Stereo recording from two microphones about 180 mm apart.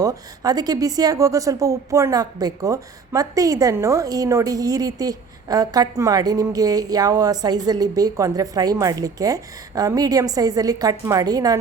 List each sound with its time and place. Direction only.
0.0 s speech: 20° right (ahead or behind)